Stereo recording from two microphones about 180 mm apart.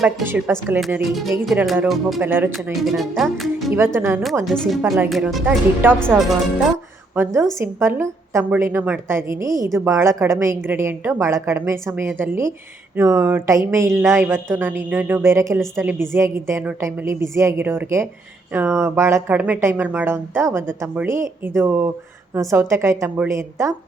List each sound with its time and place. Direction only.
0.3 s a woman's voice: 10° right (ahead or behind)
1.5 s speech: centre (ahead or behind)
2.2 s a woman's voice: 10° right (ahead or behind)
2.8 s speech: centre (ahead or behind)
3.7 s a woman's voice: 15° right (ahead or behind)
4.4 s speech: centre (ahead or behind)
7.2 s a woman's voice: 15° right (ahead or behind)